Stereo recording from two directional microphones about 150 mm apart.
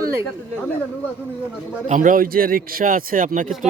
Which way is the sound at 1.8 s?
60° right (ahead or behind).